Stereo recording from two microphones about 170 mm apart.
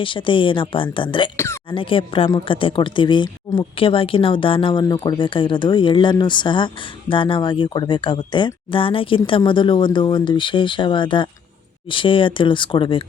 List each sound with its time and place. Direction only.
0.0 s a woman's voice: 30° left (ahead or behind)